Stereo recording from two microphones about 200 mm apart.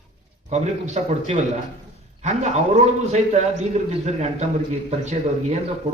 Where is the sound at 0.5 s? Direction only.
35° right (ahead or behind).